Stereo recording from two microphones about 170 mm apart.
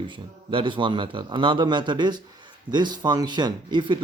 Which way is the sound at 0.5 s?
30° right (ahead or behind).